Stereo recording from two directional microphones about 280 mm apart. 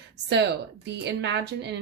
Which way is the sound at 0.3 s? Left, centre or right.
Right.